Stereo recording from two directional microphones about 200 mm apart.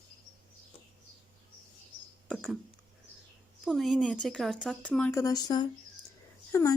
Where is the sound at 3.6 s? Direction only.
Centre (ahead or behind); by 6.8 s 15° left (ahead or behind).